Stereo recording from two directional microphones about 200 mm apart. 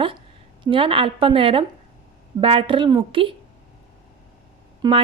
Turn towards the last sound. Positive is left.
turn(degrees=-20)  # may be behind; listen again after turning